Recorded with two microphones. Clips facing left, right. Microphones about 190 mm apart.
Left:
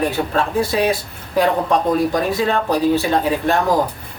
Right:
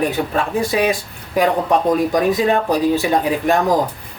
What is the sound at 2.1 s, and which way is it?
Speech, 15° right (ahead or behind).